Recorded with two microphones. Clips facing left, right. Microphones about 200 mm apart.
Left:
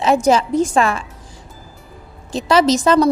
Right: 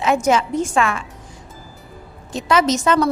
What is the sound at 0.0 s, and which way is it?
A woman's voice, 35° left (ahead or behind).